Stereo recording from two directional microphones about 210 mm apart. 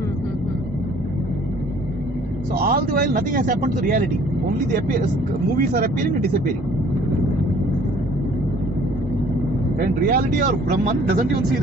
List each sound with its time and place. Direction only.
2.5 s speech: 45° right (ahead or behind)
5.6 s speech: 45° right (ahead or behind)
9.8 s speech: 45° right (ahead or behind)